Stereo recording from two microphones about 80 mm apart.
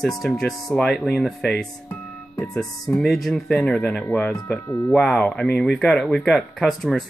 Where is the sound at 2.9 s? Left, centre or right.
Centre.